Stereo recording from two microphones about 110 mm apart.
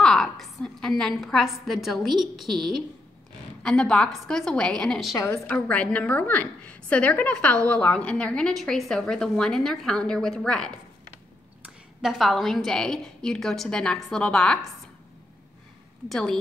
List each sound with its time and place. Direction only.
0.0 s a woman's voice: 5° left (ahead or behind)
5.1 s a woman's voice: 25° left (ahead or behind)
5.5 s a woman's voice: 10° left (ahead or behind)
16.1 s a woman's voice: 5° left (ahead or behind)